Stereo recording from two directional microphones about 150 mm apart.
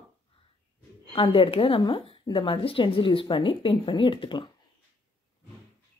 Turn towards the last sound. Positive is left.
turn(degrees=35)  # may be behind; listen again after turning